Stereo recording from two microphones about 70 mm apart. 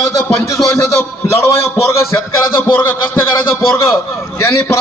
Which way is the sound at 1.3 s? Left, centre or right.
Left.